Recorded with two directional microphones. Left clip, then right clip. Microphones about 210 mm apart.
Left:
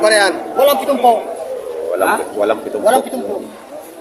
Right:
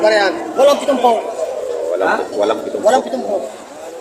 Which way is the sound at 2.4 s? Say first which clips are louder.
Right 1 dB; 20° left (ahead or behind).